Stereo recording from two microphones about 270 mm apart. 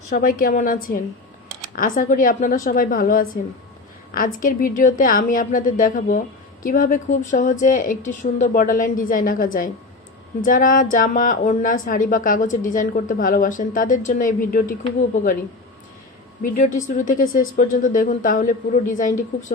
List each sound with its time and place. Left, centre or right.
0.1 s a woman's voice: left
17.0 s a woman's voice: left